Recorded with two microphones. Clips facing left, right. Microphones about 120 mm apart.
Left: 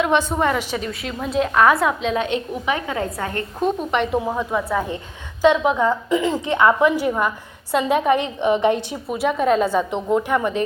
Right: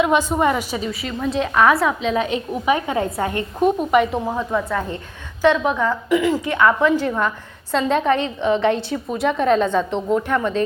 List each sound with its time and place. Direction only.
0.0 s a woman's voice: 10° right (ahead or behind)
2.9 s a woman's voice: 20° right (ahead or behind)
3.8 s a woman's voice: 5° right (ahead or behind); by 9.1 s 15° left (ahead or behind)
9.1 s a woman's voice: 5° left (ahead or behind)